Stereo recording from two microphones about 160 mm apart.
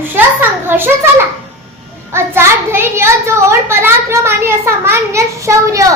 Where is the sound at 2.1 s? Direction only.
15° right (ahead or behind).